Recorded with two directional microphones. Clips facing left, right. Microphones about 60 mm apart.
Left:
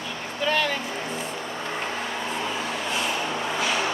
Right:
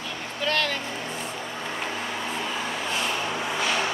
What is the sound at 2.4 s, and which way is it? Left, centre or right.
Vehicle, centre.